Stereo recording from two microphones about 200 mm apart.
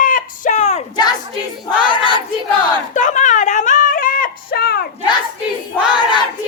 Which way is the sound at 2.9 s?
40° left (ahead or behind).